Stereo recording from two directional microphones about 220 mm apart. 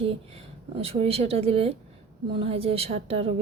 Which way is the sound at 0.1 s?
25° right (ahead or behind).